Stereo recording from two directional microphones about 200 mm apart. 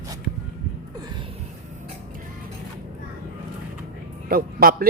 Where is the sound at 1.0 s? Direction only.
25° right (ahead or behind).